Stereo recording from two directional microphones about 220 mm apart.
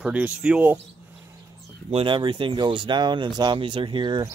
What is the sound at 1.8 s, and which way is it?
Speech, 25° right (ahead or behind).